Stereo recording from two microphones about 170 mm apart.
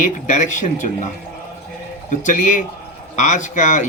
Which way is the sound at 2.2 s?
50° left (ahead or behind).